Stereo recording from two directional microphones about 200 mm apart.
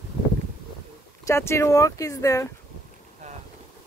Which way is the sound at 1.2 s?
15° left (ahead or behind).